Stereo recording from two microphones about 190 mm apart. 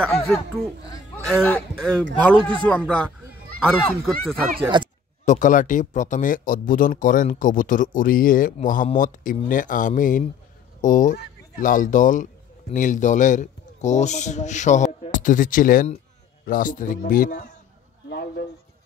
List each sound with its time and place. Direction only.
0.0 s speech: 5° left (ahead or behind)
4.6 s speech: 25° right (ahead or behind)
5.2 s speech: 40° left (ahead or behind)